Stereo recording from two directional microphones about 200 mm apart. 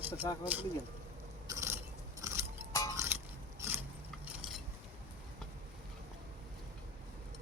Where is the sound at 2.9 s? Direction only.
15° right (ahead or behind).